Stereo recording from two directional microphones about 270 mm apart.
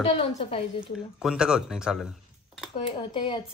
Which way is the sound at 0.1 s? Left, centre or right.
Left.